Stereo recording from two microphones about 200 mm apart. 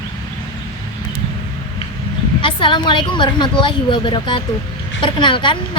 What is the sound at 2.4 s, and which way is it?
A woman's voice, 25° left (ahead or behind).